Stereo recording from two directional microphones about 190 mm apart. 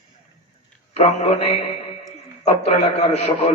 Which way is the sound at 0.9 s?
35° left (ahead or behind).